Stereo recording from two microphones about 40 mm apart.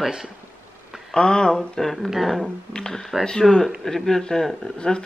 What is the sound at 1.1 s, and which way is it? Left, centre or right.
Speech, left.